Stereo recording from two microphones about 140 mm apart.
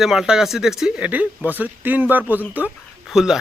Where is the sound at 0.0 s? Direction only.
5° right (ahead or behind).